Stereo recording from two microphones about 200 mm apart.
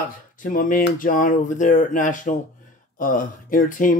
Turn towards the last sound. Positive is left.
turn(degrees=40)  # may be behind; listen again after turning